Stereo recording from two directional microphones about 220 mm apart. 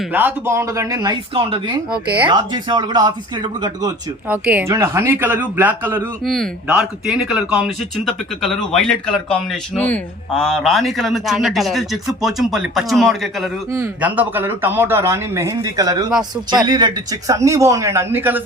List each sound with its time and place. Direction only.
0.0 s speech: 10° right (ahead or behind)
4.3 s speech: 5° right (ahead or behind)
13.7 s speech: 10° right (ahead or behind)